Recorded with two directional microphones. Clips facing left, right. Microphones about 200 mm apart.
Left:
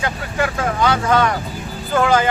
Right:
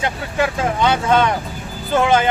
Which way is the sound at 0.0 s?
25° right (ahead or behind).